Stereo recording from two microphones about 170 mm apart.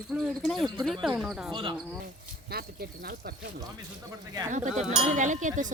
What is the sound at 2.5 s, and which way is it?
Speech, 65° right (ahead or behind).